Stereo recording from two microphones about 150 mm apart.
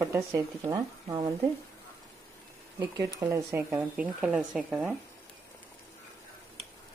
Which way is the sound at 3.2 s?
20° right (ahead or behind).